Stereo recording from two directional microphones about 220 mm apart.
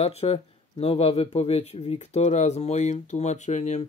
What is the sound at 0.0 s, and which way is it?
Speech, 30° left (ahead or behind).